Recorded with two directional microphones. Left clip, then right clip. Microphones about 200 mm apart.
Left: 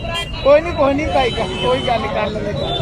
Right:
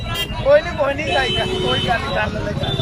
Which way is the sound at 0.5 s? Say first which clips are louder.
Left 2 dB; 20° left (ahead or behind).